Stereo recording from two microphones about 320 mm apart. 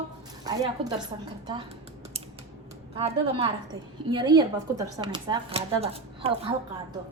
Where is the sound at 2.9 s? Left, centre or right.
Centre.